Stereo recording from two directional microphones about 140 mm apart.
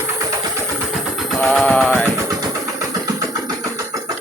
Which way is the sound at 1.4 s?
5° left (ahead or behind).